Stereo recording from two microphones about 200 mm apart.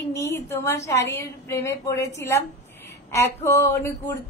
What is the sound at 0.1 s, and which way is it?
A woman's voice, 15° left (ahead or behind).